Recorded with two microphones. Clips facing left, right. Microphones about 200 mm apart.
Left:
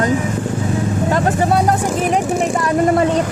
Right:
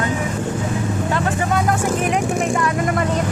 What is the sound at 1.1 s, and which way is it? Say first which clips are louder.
Speech: left 5 dB; 35° left (ahead or behind).